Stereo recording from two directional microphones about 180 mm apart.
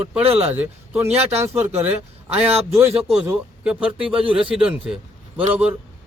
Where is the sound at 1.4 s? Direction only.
15° right (ahead or behind).